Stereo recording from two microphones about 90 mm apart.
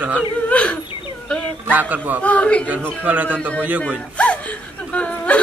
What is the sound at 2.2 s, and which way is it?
Speech, 15° left (ahead or behind).